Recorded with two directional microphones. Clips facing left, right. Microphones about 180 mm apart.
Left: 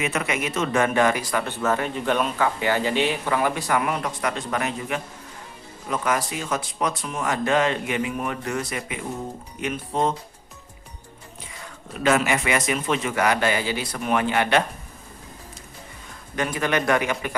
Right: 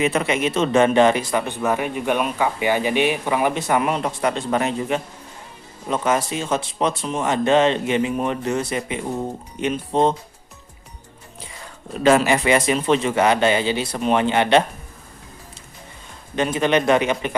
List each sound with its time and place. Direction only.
0.0 s a man's voice: 30° right (ahead or behind)
12.0 s a man's voice: 30° right (ahead or behind)
16.3 s a man's voice: 25° right (ahead or behind)